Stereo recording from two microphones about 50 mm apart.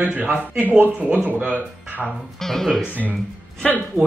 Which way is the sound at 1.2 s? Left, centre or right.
Right.